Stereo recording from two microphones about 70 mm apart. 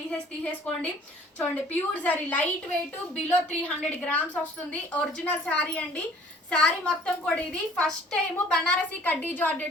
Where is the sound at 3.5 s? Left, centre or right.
Centre.